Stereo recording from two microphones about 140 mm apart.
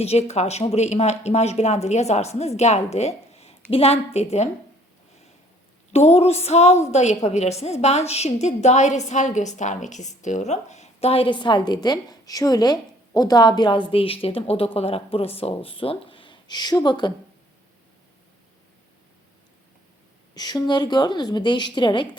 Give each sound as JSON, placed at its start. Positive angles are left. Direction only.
{"t": 0.0, "sound": "a woman's voice", "side_deg": 50}
{"t": 5.9, "sound": "a woman's voice", "side_deg": 50}
{"t": 20.3, "sound": "a woman's voice", "side_deg": 30}